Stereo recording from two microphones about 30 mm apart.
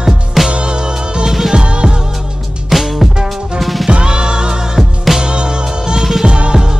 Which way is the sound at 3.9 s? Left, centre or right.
Right.